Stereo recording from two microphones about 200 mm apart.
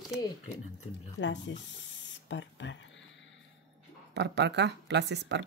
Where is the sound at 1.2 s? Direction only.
65° left (ahead or behind).